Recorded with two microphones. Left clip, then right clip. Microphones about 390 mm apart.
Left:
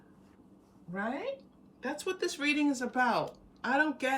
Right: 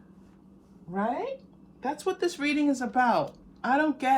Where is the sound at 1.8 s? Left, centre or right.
Centre.